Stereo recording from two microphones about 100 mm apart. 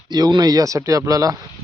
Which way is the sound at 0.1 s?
45° right (ahead or behind).